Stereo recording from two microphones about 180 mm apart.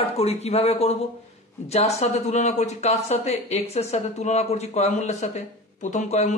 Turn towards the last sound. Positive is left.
turn(degrees=40)  # may be behind; listen again after turning